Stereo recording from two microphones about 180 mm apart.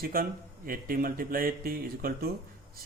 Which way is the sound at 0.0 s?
55° right (ahead or behind).